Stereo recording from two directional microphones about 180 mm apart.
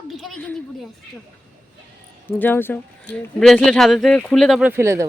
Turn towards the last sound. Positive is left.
turn(degrees=-15)  # may be behind; listen again after turning